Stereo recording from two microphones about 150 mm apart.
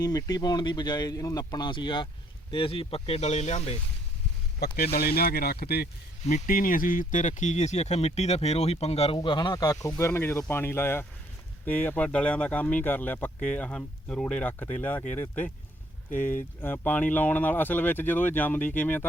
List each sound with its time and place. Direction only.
0.0 s speech: 25° left (ahead or behind); by 3.8 s 45° left (ahead or behind)
4.6 s speech: 90° left
6.2 s speech: 60° left (ahead or behind); by 19.0 s 10° left (ahead or behind)